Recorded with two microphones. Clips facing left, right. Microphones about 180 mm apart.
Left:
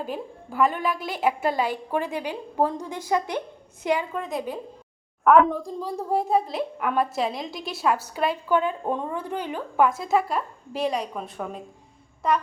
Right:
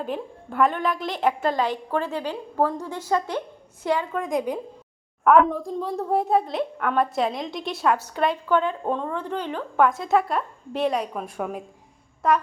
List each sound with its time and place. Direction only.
0.0 s a woman's voice: 5° left (ahead or behind)
4.2 s speech: 15° right (ahead or behind)
5.2 s speech: centre (ahead or behind)